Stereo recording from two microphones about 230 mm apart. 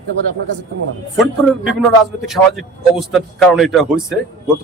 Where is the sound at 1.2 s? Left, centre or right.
Centre.